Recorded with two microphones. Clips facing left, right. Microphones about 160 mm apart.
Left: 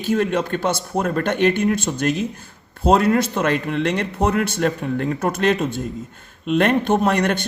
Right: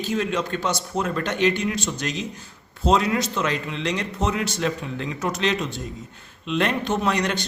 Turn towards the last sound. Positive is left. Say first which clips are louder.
# left 4 dB
turn(degrees=55)  # may be behind; listen again after turning